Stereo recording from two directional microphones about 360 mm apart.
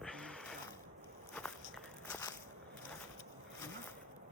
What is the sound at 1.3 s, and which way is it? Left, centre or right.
Walk, centre.